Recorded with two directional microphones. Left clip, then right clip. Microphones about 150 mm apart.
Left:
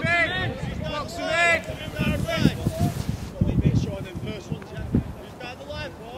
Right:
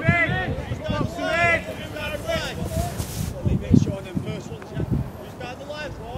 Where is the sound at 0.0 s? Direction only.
20° left (ahead or behind).